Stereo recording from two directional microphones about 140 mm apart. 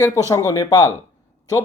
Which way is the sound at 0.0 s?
20° left (ahead or behind).